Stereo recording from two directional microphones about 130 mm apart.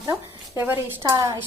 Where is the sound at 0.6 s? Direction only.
15° right (ahead or behind).